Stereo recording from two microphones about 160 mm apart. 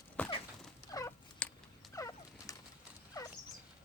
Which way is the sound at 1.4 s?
10° left (ahead or behind).